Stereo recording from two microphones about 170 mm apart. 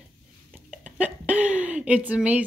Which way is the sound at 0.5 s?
10° right (ahead or behind).